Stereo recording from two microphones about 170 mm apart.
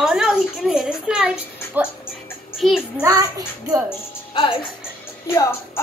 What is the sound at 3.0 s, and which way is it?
Speech, 20° right (ahead or behind).